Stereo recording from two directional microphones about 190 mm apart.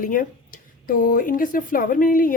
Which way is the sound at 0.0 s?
45° left (ahead or behind).